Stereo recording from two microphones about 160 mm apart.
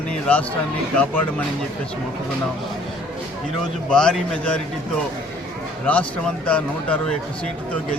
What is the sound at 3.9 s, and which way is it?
Speech, 5° left (ahead or behind).